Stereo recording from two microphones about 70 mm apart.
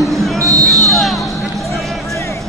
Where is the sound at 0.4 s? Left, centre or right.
Right.